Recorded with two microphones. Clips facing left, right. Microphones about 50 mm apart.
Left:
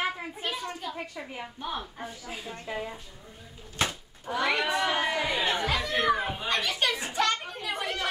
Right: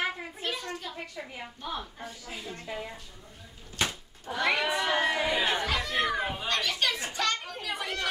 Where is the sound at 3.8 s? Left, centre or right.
Centre.